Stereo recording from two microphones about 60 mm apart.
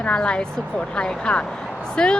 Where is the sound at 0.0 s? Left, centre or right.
Centre.